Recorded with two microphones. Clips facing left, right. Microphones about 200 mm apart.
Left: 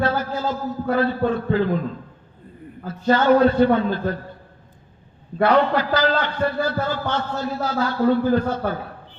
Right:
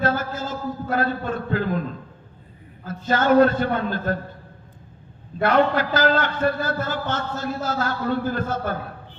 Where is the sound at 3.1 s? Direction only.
50° right (ahead or behind).